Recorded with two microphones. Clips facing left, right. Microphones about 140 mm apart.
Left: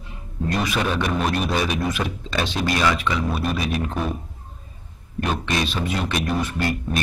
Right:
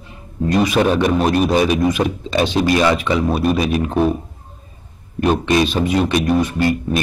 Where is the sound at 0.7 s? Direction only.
35° right (ahead or behind); by 3.8 s 20° right (ahead or behind).